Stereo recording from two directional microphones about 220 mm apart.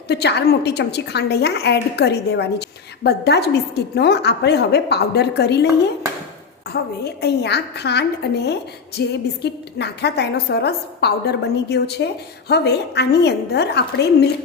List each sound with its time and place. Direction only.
0.1 s a woman's voice: 50° left (ahead or behind)
7.0 s a woman's voice: 50° left (ahead or behind)